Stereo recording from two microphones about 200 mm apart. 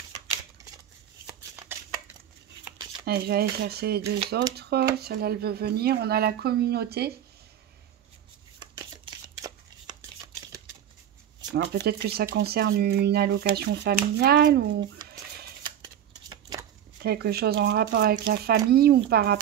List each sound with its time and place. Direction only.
3.1 s speech: 50° right (ahead or behind)
8.7 s shuffling cards: 15° right (ahead or behind)
11.5 s speech: 55° right (ahead or behind)
16.3 s scissors: 20° right (ahead or behind)
17.0 s speech: 50° right (ahead or behind)